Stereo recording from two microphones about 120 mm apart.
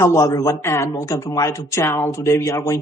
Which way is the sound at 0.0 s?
25° left (ahead or behind).